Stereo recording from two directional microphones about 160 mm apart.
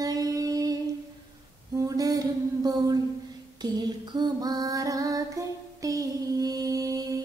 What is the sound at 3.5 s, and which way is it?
Female singing, 25° right (ahead or behind).